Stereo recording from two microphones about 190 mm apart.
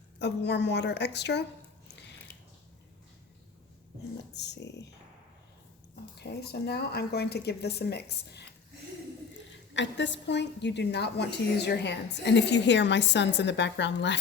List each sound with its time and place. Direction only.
0.2 s speech: 65° left (ahead or behind)
4.4 s speech: 65° left (ahead or behind)
6.1 s speech: 55° left (ahead or behind)
9.7 s a woman's voice: 70° left (ahead or behind)